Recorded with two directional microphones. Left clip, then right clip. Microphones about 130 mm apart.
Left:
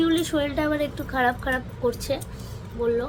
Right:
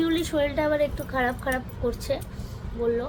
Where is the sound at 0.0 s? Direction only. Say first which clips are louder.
Left 1 dB; 5° left (ahead or behind).